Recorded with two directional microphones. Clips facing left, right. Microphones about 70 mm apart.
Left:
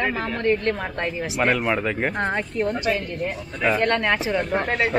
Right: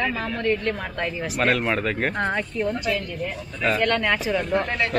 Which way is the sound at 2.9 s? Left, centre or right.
Left.